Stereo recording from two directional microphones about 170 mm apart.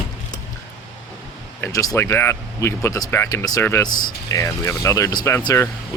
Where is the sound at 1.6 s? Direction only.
20° left (ahead or behind).